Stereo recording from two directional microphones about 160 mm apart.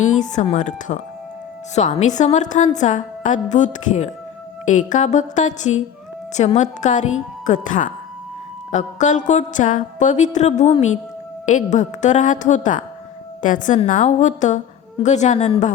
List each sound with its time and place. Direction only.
0.5 s music: 50° left (ahead or behind)